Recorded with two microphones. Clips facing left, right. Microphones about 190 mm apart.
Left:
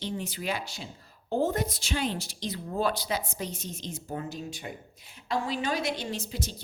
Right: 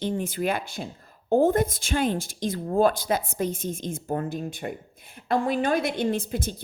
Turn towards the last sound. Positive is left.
turn(degrees=-55)  # may be behind; listen again after turning